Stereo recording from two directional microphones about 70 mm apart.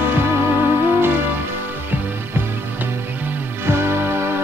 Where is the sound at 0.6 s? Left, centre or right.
Right.